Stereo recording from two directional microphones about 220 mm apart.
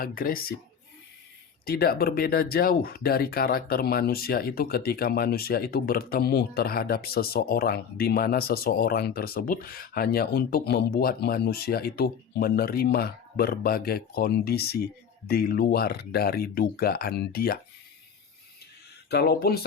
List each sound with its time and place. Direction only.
0.0 s speech: 40° left (ahead or behind)
1.6 s speech: 45° left (ahead or behind)
19.1 s speech: 45° left (ahead or behind)